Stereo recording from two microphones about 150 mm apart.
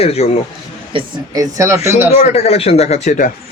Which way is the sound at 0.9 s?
35° right (ahead or behind).